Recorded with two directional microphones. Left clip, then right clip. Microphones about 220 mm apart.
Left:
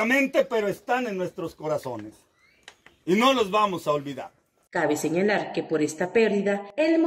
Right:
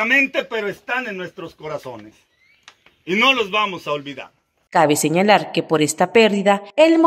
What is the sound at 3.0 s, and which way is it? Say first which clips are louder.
A man's voice: right 5 dB; 30° left (ahead or behind).